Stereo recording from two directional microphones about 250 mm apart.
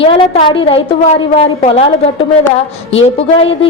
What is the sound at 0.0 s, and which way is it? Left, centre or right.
A woman's voice, left.